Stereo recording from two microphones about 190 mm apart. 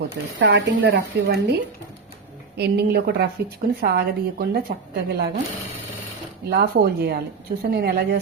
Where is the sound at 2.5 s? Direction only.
60° right (ahead or behind).